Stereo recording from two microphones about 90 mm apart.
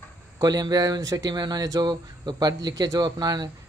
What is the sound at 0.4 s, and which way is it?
Speech, 45° right (ahead or behind).